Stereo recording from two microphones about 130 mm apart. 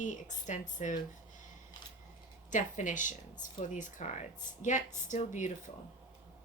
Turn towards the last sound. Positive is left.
turn(degrees=70)  # may be behind; listen again after turning